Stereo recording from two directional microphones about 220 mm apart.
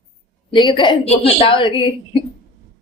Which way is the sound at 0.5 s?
20° left (ahead or behind).